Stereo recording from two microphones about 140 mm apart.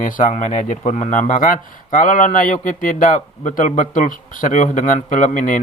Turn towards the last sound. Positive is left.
turn(degrees=65)  # may be behind; listen again after turning